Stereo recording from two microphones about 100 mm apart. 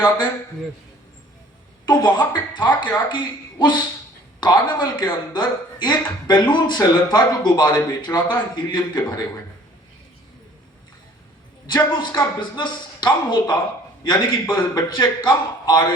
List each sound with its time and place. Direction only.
1.9 s speech: 45° left (ahead or behind)
11.6 s speech: 45° left (ahead or behind)